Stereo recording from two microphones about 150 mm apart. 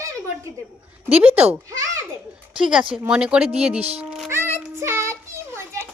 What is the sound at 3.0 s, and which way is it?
Speech, 5° right (ahead or behind).